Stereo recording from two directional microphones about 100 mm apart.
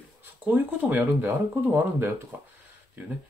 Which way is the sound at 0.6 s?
15° right (ahead or behind).